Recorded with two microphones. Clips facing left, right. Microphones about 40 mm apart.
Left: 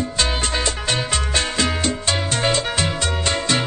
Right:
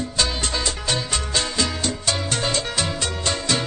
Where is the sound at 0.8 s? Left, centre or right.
Left.